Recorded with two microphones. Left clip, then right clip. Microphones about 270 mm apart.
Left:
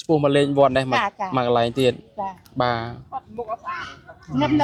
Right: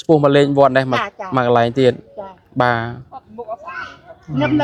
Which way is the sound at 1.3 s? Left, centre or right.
Right.